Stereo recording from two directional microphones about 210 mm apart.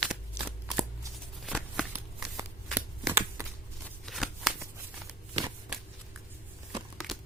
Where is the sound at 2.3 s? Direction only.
10° right (ahead or behind).